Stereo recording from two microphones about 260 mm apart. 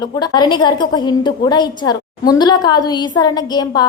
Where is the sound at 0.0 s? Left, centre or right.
Centre.